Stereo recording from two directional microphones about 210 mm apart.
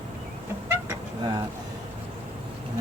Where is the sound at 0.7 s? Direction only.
15° right (ahead or behind).